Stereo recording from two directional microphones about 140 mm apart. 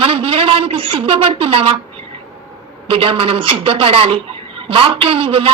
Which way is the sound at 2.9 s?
40° right (ahead or behind).